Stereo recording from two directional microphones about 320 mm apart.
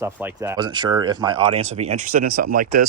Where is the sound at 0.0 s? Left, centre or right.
Centre.